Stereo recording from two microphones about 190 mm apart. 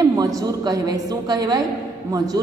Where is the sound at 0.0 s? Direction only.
20° right (ahead or behind).